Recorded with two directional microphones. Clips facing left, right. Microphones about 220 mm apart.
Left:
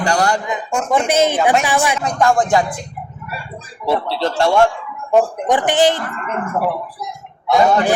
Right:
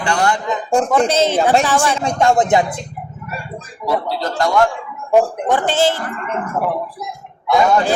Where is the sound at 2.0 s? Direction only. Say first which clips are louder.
Right 1 dB; 25° right (ahead or behind).